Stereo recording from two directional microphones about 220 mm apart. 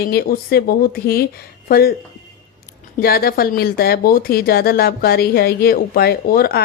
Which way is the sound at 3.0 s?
45° left (ahead or behind).